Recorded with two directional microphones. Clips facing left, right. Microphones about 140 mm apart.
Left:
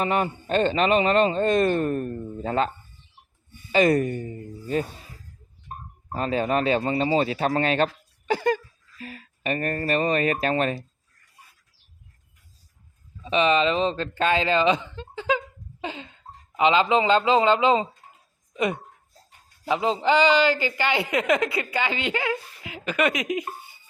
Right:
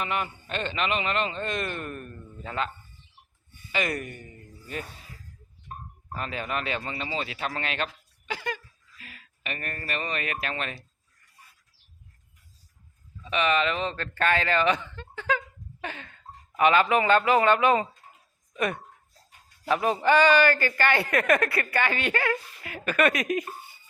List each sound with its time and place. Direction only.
0.0 s speech: 35° left (ahead or behind)
13.2 s a man's voice: 25° left (ahead or behind)